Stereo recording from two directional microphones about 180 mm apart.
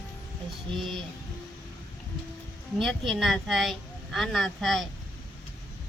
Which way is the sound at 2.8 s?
Centre (ahead or behind).